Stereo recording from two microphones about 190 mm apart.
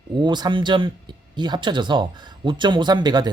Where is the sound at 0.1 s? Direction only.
25° right (ahead or behind).